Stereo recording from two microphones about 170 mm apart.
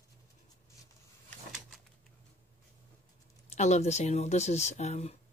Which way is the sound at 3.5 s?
40° left (ahead or behind).